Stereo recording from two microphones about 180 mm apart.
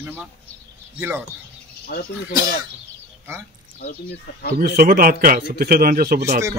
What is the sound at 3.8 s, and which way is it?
Speech, 65° left (ahead or behind).